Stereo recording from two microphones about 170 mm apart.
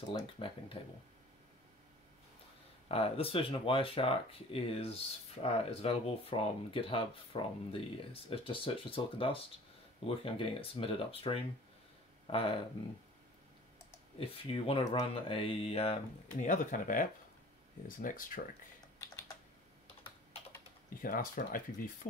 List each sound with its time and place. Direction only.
0.1 s speech: 30° left (ahead or behind)
2.9 s speech: 35° left (ahead or behind)
14.2 s speech: 30° left (ahead or behind)
16.3 s speech: 50° left (ahead or behind)
21.0 s speech: 55° left (ahead or behind)